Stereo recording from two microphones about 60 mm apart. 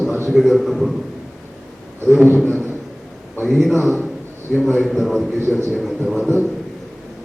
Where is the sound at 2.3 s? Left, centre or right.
Left.